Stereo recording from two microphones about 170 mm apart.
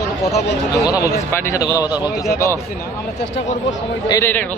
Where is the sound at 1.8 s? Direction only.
10° right (ahead or behind).